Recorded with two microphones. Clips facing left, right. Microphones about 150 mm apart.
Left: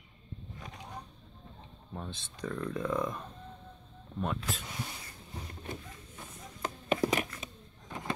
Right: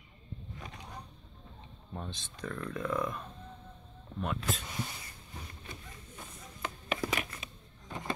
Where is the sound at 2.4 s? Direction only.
15° left (ahead or behind).